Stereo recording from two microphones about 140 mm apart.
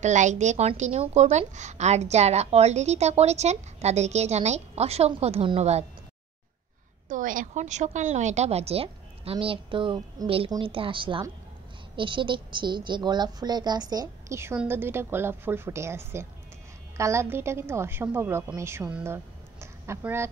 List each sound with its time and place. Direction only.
0.0 s a woman's voice: 60° right (ahead or behind)
7.1 s a woman's voice: 70° right (ahead or behind); by 14.4 s 30° right (ahead or behind)
14.6 s a woman's voice: 15° right (ahead or behind)
19.0 s a sound: 20° right (ahead or behind)